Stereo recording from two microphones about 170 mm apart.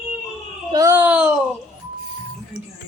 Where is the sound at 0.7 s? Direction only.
15° right (ahead or behind).